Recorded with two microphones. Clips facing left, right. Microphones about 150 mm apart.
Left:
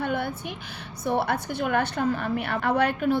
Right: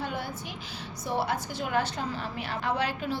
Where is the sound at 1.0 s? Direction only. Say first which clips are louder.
Left 5 dB; 60° left (ahead or behind).